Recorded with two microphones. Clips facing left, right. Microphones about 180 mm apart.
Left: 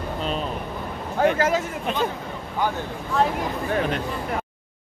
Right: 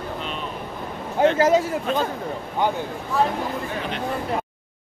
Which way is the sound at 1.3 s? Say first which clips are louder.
Right 4 dB; 25° right (ahead or behind).